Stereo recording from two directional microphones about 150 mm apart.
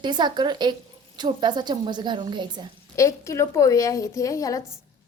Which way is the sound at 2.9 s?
20° left (ahead or behind).